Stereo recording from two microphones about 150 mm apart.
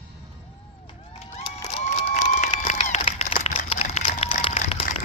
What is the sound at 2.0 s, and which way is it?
Crowd, 45° left (ahead or behind).